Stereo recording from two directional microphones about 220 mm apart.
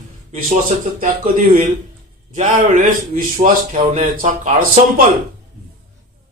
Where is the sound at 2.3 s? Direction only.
35° right (ahead or behind).